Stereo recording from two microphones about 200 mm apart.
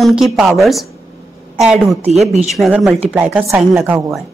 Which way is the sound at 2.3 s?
35° right (ahead or behind).